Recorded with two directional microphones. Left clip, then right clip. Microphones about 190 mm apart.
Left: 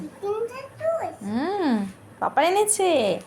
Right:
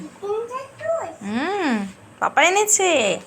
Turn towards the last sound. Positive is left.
turn(degrees=15)  # may be behind; listen again after turning